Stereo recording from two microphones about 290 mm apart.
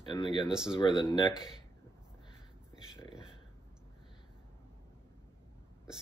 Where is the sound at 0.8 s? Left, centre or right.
Centre.